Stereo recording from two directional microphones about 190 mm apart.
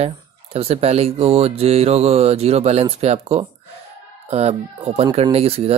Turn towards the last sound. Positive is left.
turn(degrees=-30)  # may be behind; listen again after turning